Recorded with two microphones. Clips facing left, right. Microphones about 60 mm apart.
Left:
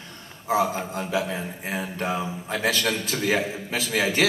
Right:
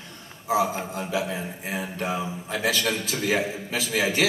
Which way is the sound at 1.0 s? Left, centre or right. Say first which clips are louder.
Left 1 dB; left.